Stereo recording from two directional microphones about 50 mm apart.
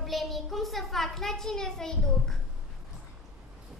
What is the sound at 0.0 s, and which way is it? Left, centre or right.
A child's voice, centre.